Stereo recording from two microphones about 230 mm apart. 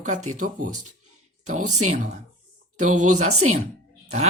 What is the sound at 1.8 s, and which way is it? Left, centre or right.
Speech, right.